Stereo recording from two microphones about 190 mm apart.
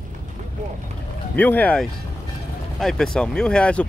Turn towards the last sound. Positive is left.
turn(degrees=5)  # may be behind; listen again after turning